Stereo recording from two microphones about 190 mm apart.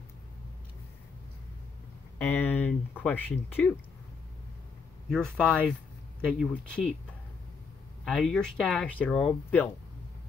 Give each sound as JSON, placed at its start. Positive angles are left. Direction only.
{"t": 2.1, "sound": "speech", "side_deg": 10}
{"t": 5.1, "sound": "speech", "side_deg": 5}
{"t": 8.0, "sound": "speech", "side_deg": 0}